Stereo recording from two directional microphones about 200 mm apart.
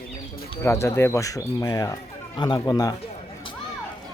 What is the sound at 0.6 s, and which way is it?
Speech, 15° left (ahead or behind).